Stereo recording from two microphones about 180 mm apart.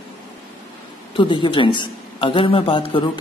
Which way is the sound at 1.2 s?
25° left (ahead or behind).